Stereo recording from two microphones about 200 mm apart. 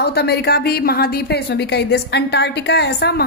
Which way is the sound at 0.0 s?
55° left (ahead or behind).